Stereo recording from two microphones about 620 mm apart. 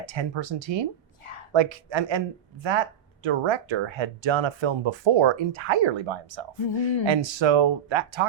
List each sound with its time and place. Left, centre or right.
0.0 s speech: right
1.2 s a sound: left
1.5 s speech: right